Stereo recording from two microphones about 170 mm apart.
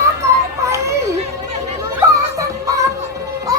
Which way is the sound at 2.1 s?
20° right (ahead or behind).